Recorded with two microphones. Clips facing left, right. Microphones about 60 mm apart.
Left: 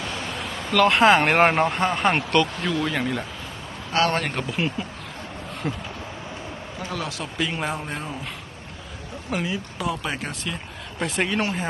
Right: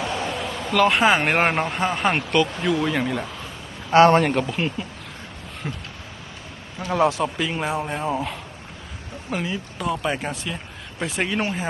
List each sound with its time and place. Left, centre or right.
0.3 s speech: centre
3.9 s speech: right
4.2 s speech: centre
6.7 s speech: right
7.2 s speech: centre
9.3 s speech: centre